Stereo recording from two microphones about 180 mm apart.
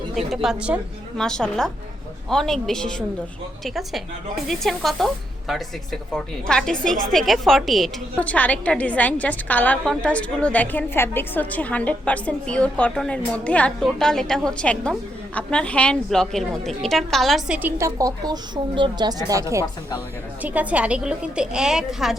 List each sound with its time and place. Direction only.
0.3 s a woman's voice: 5° right (ahead or behind)